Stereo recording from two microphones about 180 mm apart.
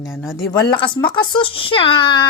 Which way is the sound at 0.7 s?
25° left (ahead or behind).